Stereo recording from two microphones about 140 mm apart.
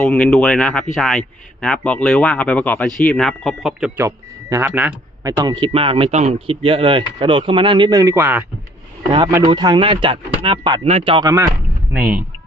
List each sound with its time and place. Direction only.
0.1 s speech: 5° left (ahead or behind)
3.9 s speech: 20° right (ahead or behind)
5.2 s a man's voice: 25° right (ahead or behind)
9.5 s a man's voice: 30° right (ahead or behind)
11.9 s speech: 10° right (ahead or behind)